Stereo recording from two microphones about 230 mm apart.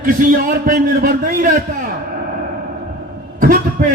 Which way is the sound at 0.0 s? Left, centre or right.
Right.